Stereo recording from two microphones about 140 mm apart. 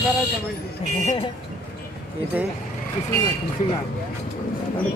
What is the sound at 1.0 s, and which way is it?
Speech, 35° left (ahead or behind).